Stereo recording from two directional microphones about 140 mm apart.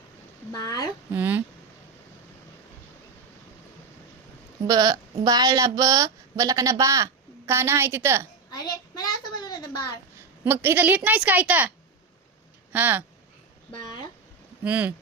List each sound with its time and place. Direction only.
0.5 s speech: 30° left (ahead or behind)
1.1 s speech: 15° right (ahead or behind)
4.6 s speech: 30° right (ahead or behind)
8.4 s a sound: 30° left (ahead or behind)
10.2 s a woman's voice: 15° right (ahead or behind)
12.7 s speech: 10° right (ahead or behind)
14.6 s speech: 10° right (ahead or behind)